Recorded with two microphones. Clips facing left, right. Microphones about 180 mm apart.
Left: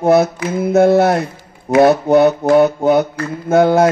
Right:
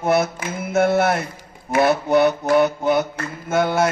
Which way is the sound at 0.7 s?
35° left (ahead or behind).